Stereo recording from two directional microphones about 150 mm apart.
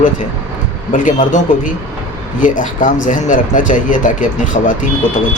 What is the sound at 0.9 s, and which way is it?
Speech, 60° left (ahead or behind).